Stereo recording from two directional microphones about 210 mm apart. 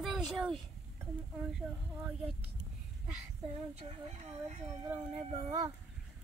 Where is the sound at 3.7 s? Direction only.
30° right (ahead or behind).